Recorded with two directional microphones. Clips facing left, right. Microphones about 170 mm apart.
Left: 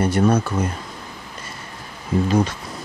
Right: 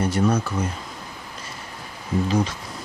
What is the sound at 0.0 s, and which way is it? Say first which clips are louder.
Speech: left 3 dB; 60° left (ahead or behind).